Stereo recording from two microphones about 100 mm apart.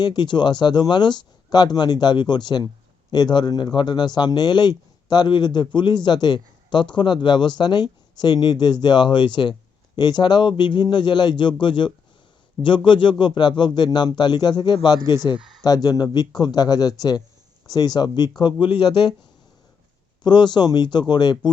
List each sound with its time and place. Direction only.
0.0 s a man's voice: 45° left (ahead or behind)
15.4 s a sound: centre (ahead or behind)
15.6 s a man's voice: 40° left (ahead or behind)
20.2 s a man's voice: 50° left (ahead or behind)